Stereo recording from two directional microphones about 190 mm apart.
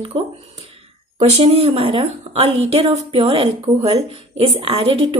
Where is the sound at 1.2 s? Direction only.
30° right (ahead or behind).